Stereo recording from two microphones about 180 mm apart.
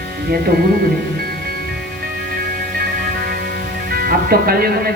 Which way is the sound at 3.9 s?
55° right (ahead or behind).